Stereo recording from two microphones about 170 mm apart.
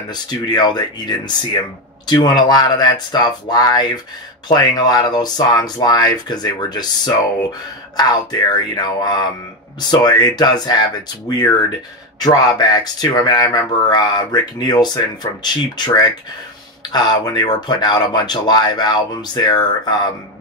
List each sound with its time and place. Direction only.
0.1 s speech: 25° left (ahead or behind)